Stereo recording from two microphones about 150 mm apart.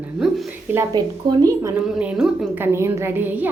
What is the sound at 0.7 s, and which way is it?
A woman's voice, 15° right (ahead or behind).